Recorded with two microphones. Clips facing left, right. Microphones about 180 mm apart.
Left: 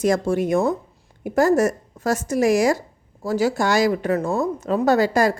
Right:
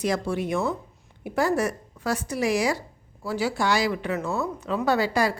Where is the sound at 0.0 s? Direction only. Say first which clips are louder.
Left 6 dB; 45° left (ahead or behind).